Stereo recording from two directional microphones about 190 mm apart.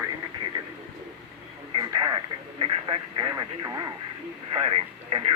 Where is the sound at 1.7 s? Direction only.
20° right (ahead or behind).